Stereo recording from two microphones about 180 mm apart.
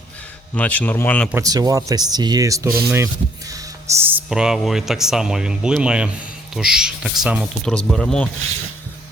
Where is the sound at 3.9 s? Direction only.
15° right (ahead or behind).